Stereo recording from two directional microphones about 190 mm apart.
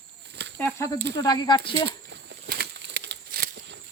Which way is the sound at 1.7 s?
65° right (ahead or behind).